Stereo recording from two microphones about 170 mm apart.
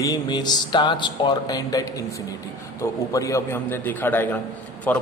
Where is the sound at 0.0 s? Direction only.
25° left (ahead or behind).